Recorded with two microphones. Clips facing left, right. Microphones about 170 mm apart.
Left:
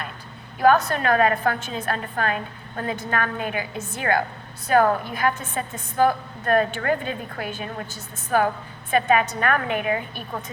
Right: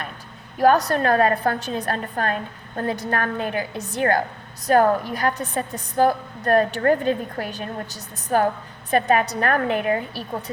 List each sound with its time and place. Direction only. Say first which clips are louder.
0.6 s a woman's voice: right 1 dB; 40° right (ahead or behind)